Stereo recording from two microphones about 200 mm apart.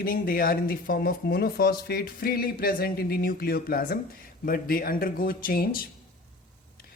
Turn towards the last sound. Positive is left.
turn(degrees=45)  # may be behind; listen again after turning